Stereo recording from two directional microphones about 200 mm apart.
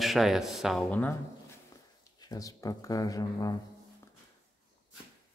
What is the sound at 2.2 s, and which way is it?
Speech, 15° left (ahead or behind).